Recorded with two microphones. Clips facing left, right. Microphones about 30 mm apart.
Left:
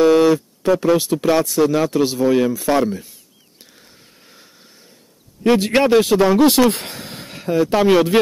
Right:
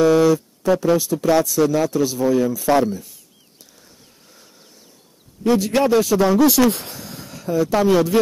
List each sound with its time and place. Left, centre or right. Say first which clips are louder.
0.0 s a man's voice: left 2 dB; left
1.6 s speech: left 1 dB; left
1.9 s a man's voice: left 2 dB; left
5.4 s a man's voice: left 2 dB; left
6.7 s a sound: left 2 dB; left
7.7 s a man's voice: left 2 dB; left